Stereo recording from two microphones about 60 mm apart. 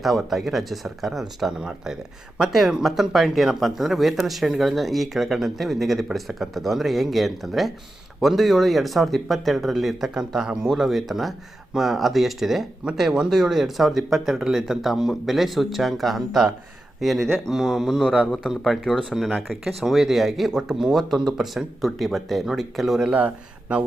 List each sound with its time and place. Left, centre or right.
0.0 s speech: centre
23.1 s speech: right